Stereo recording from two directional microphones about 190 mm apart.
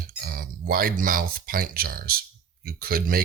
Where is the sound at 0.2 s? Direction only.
50° right (ahead or behind).